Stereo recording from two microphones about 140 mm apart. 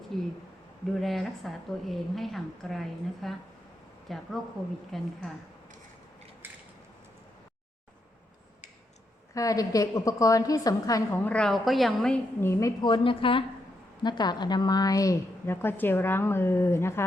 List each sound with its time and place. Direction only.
0.1 s a sound: centre (ahead or behind)
0.9 s a woman's voice: centre (ahead or behind)
6.4 s a sound: 15° right (ahead or behind)
9.3 s a woman's voice: 25° left (ahead or behind)
11.2 s a woman's voice: 10° left (ahead or behind)
12.4 s a woman's voice: 20° left (ahead or behind)
12.8 s a woman's voice: 35° left (ahead or behind); by 17.0 s 20° left (ahead or behind)